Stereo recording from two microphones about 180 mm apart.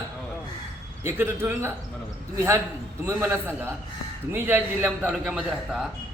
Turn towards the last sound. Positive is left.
turn(degrees=-5)  # may be behind; listen again after turning